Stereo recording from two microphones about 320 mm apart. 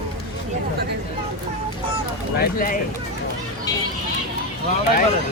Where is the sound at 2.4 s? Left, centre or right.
Left.